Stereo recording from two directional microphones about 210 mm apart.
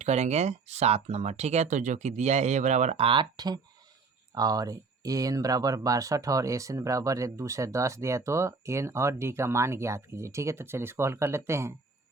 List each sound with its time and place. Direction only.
0.0 s speech: 30° right (ahead or behind); by 11.7 s 15° right (ahead or behind)